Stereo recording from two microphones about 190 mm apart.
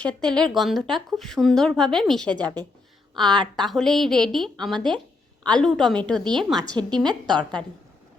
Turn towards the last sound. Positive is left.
turn(degrees=-25)  # may be behind; listen again after turning